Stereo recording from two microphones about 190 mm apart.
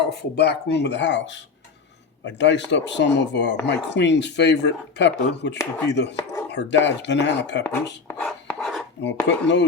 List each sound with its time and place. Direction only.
0.1 s a man's voice: 60° left (ahead or behind)
5.5 s speech: 5° left (ahead or behind)
5.9 s a man's voice: 65° left (ahead or behind)
7.6 s a sound: 10° left (ahead or behind)
9.2 s a man's voice: 70° left (ahead or behind)